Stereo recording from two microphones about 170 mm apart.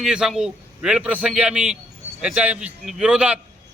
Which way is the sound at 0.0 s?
5° right (ahead or behind).